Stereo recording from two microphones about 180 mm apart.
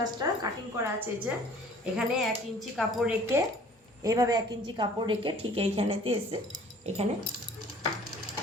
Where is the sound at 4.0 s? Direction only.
20° right (ahead or behind).